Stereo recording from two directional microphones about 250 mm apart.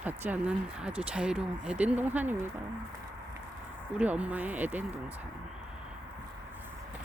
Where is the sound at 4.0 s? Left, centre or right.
Centre.